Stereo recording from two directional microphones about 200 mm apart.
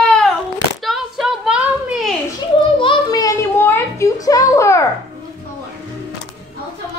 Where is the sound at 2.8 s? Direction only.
20° left (ahead or behind).